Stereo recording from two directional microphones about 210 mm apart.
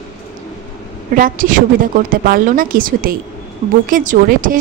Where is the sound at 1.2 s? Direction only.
40° right (ahead or behind).